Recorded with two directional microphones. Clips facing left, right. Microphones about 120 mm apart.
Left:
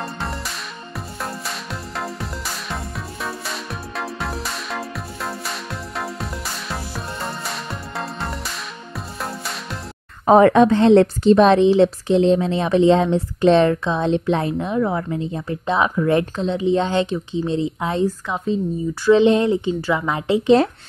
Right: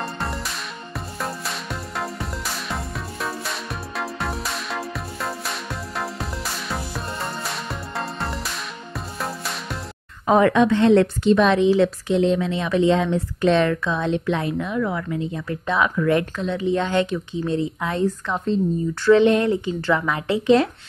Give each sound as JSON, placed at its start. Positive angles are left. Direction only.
{"t": 0.0, "sound": "music", "side_deg": 0}
{"t": 10.2, "sound": "a woman's voice", "side_deg": 35}
{"t": 18.0, "sound": "a woman's voice", "side_deg": 5}
{"t": 19.0, "sound": "a woman's voice", "side_deg": 20}